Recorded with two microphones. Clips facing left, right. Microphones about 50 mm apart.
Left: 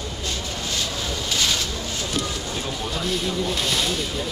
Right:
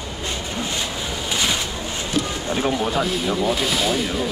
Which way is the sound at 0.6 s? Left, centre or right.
Right.